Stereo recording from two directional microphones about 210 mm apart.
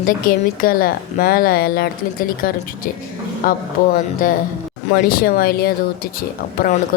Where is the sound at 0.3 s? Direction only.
45° left (ahead or behind).